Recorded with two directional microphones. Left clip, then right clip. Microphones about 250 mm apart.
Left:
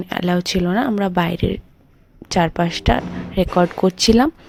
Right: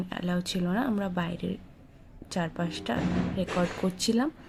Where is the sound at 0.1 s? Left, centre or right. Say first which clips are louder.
Left 14 dB; left.